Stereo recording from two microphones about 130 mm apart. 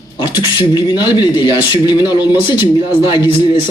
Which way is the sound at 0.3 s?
30° left (ahead or behind).